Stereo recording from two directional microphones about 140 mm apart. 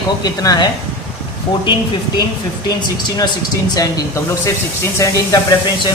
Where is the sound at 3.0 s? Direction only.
30° left (ahead or behind).